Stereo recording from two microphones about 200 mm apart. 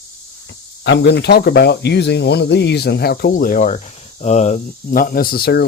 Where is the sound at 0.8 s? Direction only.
60° left (ahead or behind).